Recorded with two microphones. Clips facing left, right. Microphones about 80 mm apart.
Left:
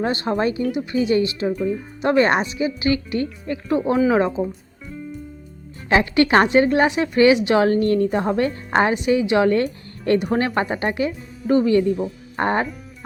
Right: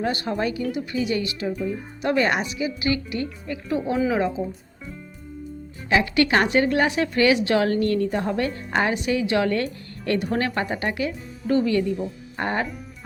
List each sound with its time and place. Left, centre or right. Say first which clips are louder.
0.0 s a woman's voice: left 4 dB; left
5.9 s speech: left 3 dB; left
6.2 s a woman's voice: left 4 dB; left